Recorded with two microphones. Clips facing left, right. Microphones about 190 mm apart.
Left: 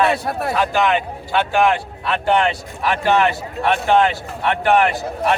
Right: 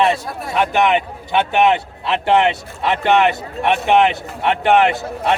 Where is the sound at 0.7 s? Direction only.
20° right (ahead or behind).